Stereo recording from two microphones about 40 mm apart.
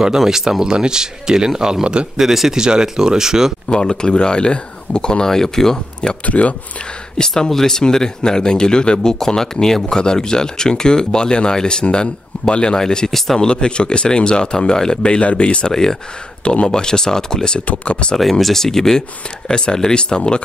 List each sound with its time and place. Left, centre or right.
0.0 s speech: centre
2.1 s speech: centre
3.6 s speech: left
5.2 s speech: centre
6.2 s speech: left
7.2 s speech: centre
13.5 s speech: left
15.7 s speech: centre
17.6 s speech: left
18.1 s speech: centre; by 20.4 s left